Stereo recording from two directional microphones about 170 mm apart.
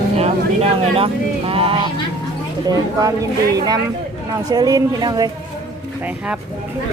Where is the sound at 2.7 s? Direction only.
20° right (ahead or behind).